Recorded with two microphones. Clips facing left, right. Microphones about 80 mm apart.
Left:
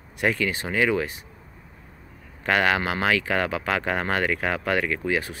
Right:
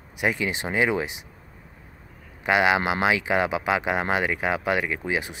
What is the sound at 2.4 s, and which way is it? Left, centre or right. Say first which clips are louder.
Speech: right 1 dB; centre.